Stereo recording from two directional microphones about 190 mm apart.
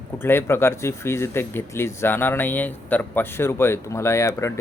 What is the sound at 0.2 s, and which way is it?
Speech, 10° left (ahead or behind).